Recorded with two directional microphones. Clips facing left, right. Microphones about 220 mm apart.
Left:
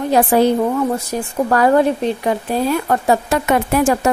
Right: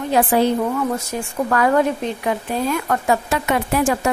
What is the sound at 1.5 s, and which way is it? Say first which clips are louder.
A woman's voice: left 4 dB; 35° left (ahead or behind).